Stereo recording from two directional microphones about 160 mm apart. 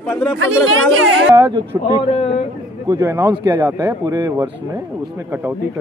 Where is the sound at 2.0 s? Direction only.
40° left (ahead or behind).